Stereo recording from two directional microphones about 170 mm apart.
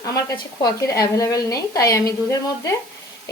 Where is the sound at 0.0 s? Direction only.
20° left (ahead or behind).